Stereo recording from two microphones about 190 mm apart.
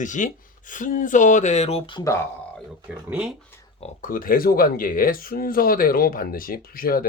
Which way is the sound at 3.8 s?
45° left (ahead or behind).